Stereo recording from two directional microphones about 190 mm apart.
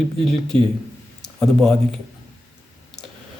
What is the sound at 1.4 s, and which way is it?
Speech, 5° left (ahead or behind).